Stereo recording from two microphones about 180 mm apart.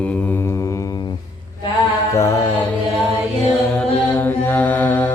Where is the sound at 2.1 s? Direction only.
15° left (ahead or behind).